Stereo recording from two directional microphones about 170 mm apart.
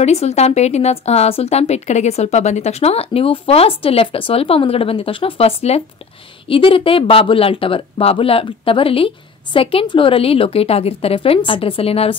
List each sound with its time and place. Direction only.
0.0 s a woman's voice: 40° left (ahead or behind)